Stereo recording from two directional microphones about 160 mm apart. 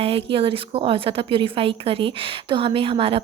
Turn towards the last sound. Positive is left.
turn(degrees=-35)  # may be behind; listen again after turning